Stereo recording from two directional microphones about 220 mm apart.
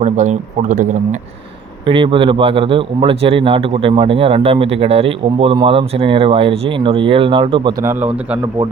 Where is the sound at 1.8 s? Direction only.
20° right (ahead or behind); by 8.4 s 5° right (ahead or behind).